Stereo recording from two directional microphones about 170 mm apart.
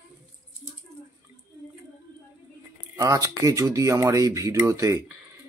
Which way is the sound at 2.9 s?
20° right (ahead or behind).